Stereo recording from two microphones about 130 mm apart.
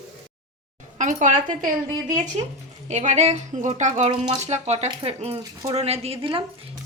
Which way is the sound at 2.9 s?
60° right (ahead or behind).